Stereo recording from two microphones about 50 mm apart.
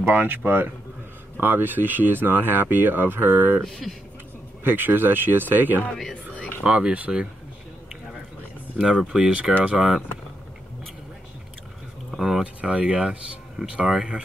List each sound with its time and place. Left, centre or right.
0.0 s speech: right
3.6 s speech: centre
4.6 s speech: right
6.3 s a sound: left
6.6 s speech: right
8.7 s speech: centre
9.5 s speech: right
9.8 s speech: centre
12.2 s speech: centre
12.6 s speech: right